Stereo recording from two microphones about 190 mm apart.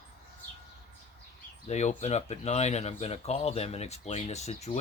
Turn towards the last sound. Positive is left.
turn(degrees=35)  # may be behind; listen again after turning